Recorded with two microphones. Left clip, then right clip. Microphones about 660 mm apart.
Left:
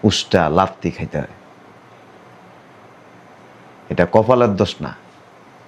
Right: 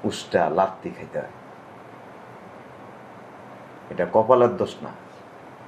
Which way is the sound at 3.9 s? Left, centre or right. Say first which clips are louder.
Left 4 dB; left.